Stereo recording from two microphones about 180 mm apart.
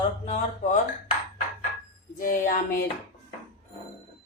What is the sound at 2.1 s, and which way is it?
Speech, 45° left (ahead or behind).